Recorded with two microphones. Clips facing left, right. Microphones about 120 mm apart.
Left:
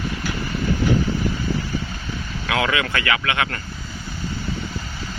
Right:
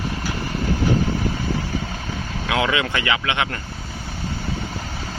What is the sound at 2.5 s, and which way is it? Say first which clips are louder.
Speech: even; 20° right (ahead or behind).